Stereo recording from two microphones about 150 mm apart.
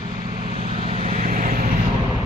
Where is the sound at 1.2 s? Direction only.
70° right (ahead or behind).